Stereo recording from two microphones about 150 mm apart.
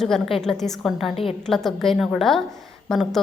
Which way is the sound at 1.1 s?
40° left (ahead or behind).